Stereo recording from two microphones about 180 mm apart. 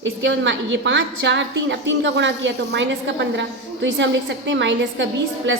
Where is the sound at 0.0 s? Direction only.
90° right.